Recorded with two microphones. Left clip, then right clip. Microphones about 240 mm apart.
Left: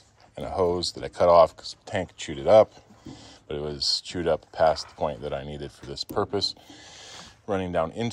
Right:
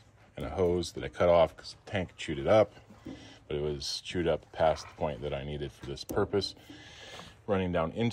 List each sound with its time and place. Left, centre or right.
0.4 s a sound: centre
0.9 s speech: centre
3.7 s speech: left
4.3 s speech: left
5.0 s speech: left
6.3 s speech: left